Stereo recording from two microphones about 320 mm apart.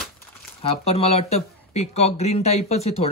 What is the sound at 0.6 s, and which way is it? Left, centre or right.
Speech, centre.